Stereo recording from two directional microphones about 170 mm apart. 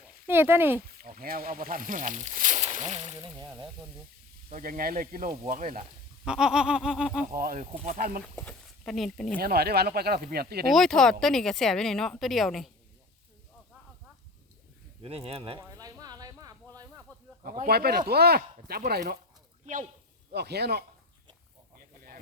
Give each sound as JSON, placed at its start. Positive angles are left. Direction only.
{"t": 0.0, "sound": "speech", "side_deg": -15}
{"t": 0.9, "sound": "speech", "side_deg": -60}
{"t": 4.4, "sound": "speech", "side_deg": -50}
{"t": 6.2, "sound": "speech", "side_deg": -5}
{"t": 7.3, "sound": "speech", "side_deg": -55}
{"t": 8.4, "sound": "speech", "side_deg": 5}
{"t": 9.4, "sound": "speech", "side_deg": -65}
{"t": 10.7, "sound": "speech", "side_deg": 0}
{"t": 15.0, "sound": "speech", "side_deg": -35}
{"t": 15.7, "sound": "a sound", "side_deg": -20}
{"t": 17.1, "sound": "a sound", "side_deg": 10}
{"t": 17.4, "sound": "speech", "side_deg": -60}
{"t": 20.3, "sound": "speech", "side_deg": -75}